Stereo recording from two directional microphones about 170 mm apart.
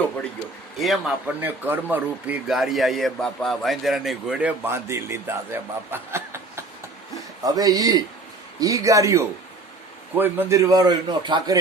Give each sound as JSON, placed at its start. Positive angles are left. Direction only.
{"t": 0.8, "sound": "a man's voice", "side_deg": 0}
{"t": 1.4, "sound": "a man's voice", "side_deg": -10}